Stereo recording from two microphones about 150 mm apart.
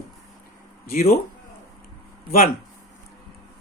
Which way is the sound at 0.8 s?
80° left.